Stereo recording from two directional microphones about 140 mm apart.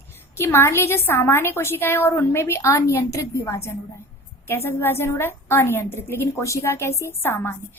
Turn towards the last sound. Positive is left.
turn(degrees=15)  # may be behind; listen again after turning